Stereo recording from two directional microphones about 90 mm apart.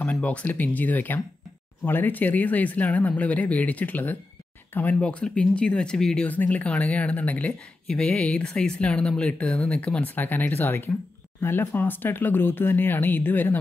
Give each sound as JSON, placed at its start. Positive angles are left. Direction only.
{"t": 0.0, "sound": "speech", "side_deg": 15}
{"t": 6.2, "sound": "speech", "side_deg": 20}